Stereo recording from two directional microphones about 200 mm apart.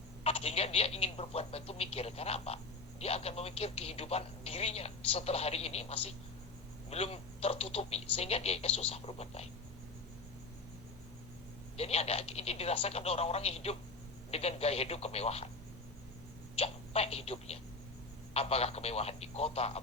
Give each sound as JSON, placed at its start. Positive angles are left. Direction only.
{"t": 0.3, "sound": "speech", "side_deg": 30}
{"t": 11.8, "sound": "speech", "side_deg": 30}
{"t": 16.6, "sound": "speech", "side_deg": 30}